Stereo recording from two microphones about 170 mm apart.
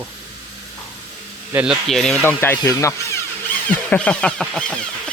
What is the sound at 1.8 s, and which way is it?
Speech, centre (ahead or behind).